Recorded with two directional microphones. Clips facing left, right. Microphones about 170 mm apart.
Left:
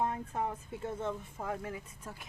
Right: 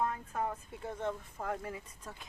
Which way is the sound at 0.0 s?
25° left (ahead or behind).